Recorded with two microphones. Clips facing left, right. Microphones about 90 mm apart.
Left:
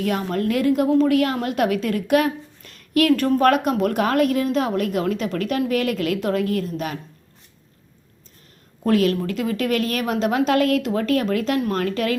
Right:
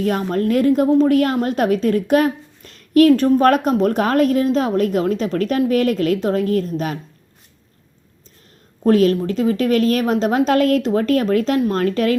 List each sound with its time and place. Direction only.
0.0 s a woman's voice: 35° right (ahead or behind)
3.1 s a woman's voice: 20° right (ahead or behind)
3.4 s a woman's voice: 35° right (ahead or behind)
8.8 s a woman's voice: 35° right (ahead or behind)